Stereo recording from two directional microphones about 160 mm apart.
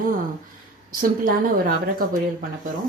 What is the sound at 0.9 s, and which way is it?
A woman's voice, 60° right (ahead or behind).